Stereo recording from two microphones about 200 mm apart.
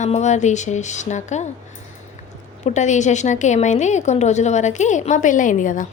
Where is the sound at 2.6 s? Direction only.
35° left (ahead or behind).